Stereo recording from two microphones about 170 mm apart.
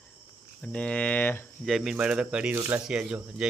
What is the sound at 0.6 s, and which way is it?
Speech, 5° left (ahead or behind).